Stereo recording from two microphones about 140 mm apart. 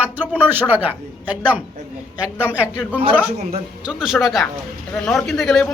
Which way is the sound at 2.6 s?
15° left (ahead or behind).